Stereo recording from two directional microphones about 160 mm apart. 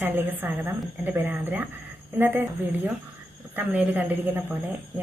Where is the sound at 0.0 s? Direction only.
15° right (ahead or behind).